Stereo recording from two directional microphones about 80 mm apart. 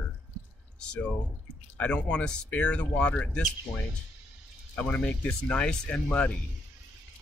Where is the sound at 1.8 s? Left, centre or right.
Centre.